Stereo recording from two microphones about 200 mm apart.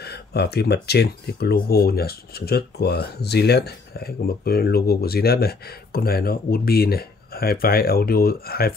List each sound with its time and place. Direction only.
0.0 s speech: 55° left (ahead or behind)